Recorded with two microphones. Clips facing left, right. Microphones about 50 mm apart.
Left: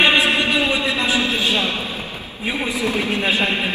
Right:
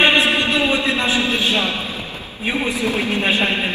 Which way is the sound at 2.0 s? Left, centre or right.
Left.